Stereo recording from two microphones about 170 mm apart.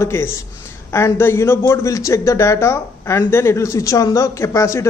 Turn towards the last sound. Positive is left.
turn(degrees=15)  # may be behind; listen again after turning